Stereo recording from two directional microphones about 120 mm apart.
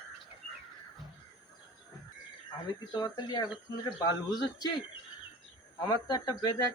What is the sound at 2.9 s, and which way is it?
Speech, 35° left (ahead or behind).